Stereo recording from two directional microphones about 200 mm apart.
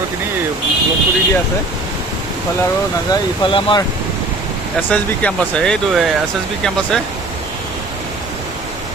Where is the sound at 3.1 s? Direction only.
25° left (ahead or behind).